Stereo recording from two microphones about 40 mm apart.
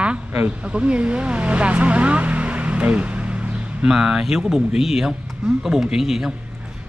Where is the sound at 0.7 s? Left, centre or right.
Right.